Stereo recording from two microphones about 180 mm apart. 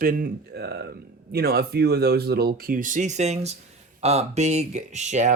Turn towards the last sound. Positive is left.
turn(degrees=-40)  # may be behind; listen again after turning